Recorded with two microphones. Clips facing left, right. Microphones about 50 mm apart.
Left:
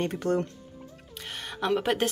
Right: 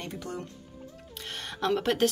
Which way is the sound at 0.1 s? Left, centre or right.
Left.